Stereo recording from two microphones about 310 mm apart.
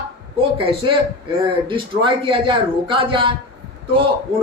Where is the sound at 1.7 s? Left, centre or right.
Centre.